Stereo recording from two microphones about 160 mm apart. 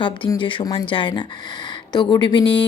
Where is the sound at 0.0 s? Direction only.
30° left (ahead or behind).